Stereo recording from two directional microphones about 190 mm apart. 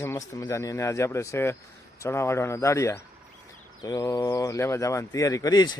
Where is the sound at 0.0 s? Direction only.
15° left (ahead or behind).